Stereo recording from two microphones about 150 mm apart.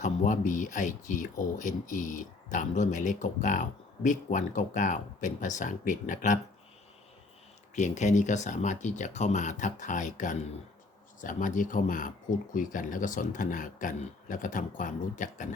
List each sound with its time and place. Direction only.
0.0 s speech: 60° left (ahead or behind)
7.8 s speech: 55° left (ahead or behind)